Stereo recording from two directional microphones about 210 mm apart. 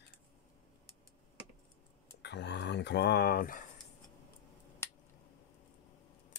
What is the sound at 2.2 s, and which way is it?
Speech, 55° left (ahead or behind).